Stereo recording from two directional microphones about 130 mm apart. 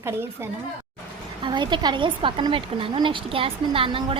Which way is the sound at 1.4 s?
40° right (ahead or behind).